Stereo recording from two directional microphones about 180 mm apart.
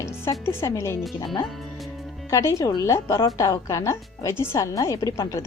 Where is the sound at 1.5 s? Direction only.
Centre (ahead or behind).